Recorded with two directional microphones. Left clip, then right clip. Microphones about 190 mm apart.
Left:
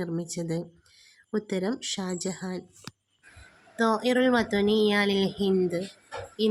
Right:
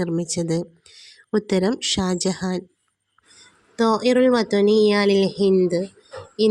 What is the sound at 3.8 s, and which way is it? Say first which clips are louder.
Speech: right 6 dB; 25° right (ahead or behind).